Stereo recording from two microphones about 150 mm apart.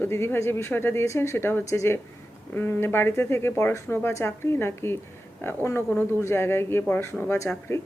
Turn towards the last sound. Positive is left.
turn(degrees=20)  # may be behind; listen again after turning